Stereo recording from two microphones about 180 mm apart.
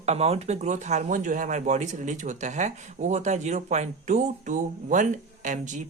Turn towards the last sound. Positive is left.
turn(degrees=-45)  # may be behind; listen again after turning